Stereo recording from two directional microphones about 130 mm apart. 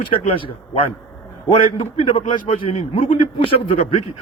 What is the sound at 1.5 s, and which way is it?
A man's voice, 50° left (ahead or behind).